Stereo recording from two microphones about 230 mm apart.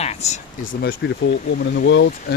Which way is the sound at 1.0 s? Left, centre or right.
Left.